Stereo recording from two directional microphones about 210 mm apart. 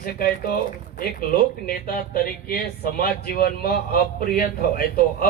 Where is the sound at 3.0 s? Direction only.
45° left (ahead or behind).